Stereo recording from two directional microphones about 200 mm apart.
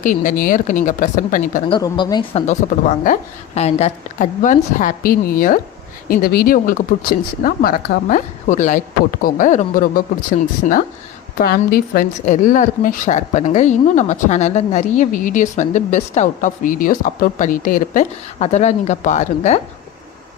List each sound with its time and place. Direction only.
0.0 s a woman's voice: 40° left (ahead or behind)
1.7 s speech: 20° left (ahead or behind)
2.5 s a woman's voice: 40° left (ahead or behind)